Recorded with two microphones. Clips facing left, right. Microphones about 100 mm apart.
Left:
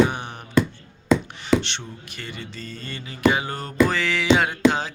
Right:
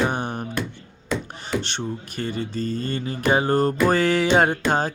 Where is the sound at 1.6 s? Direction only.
40° right (ahead or behind).